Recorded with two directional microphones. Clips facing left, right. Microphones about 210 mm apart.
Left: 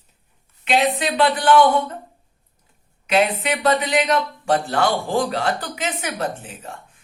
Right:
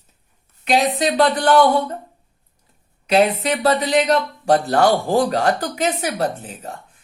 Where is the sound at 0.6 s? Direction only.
40° right (ahead or behind).